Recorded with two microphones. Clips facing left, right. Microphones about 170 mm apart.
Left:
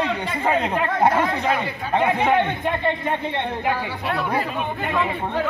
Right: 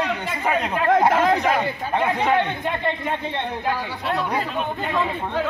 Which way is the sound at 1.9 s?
20° left (ahead or behind).